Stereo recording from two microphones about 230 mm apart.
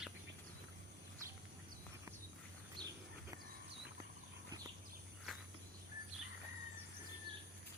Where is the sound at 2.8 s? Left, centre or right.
Centre.